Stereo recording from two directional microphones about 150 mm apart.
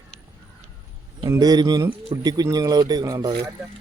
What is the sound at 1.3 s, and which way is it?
Speech, 25° right (ahead or behind).